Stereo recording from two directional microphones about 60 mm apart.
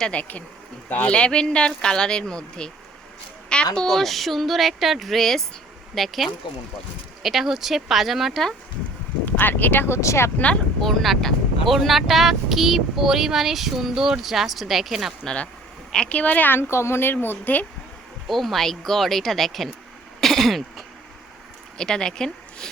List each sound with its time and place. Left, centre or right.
0.1 s speech: left
3.8 s speech: centre
9.2 s speech: left
10.0 s speech: left
10.3 s speech: left
10.8 s speech: centre
15.9 s speech: centre
16.6 s speech: left
18.3 s speech: centre
20.2 s throat clearing: centre
21.8 s speech: centre